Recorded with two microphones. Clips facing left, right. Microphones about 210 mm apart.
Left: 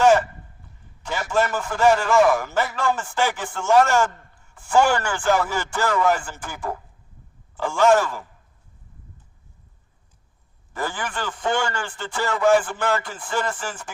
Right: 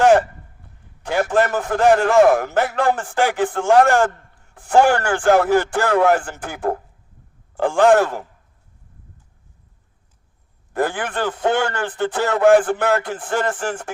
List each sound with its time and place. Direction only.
1.0 s a man's voice: 55° right (ahead or behind)
10.7 s a man's voice: 60° right (ahead or behind)